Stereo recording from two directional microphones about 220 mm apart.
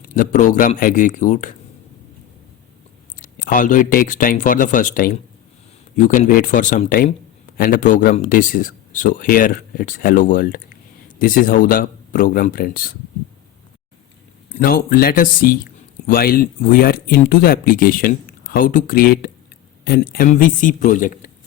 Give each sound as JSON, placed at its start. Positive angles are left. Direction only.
{"t": 0.0, "sound": "speech", "side_deg": 35}
{"t": 3.2, "sound": "speech", "side_deg": 40}
{"t": 14.5, "sound": "speech", "side_deg": 40}